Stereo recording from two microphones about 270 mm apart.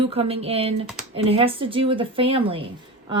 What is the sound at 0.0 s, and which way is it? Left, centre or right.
A woman's voice, right.